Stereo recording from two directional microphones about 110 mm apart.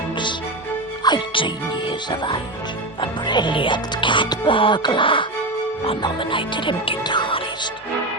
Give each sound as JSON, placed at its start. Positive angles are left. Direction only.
{"t": 1.0, "sound": "speech", "side_deg": 45}